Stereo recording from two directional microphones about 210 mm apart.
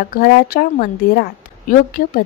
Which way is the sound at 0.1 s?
45° left (ahead or behind).